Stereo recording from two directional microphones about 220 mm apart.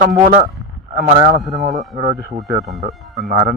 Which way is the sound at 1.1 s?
35° right (ahead or behind).